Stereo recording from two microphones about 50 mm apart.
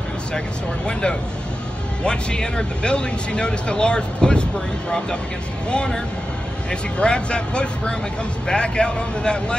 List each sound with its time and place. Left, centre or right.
2.0 s speech: centre
6.7 s speech: left